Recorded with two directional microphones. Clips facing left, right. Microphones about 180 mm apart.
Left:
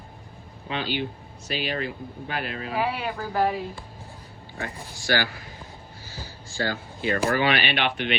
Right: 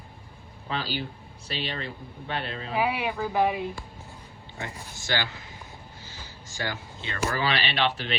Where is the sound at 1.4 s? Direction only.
30° right (ahead or behind).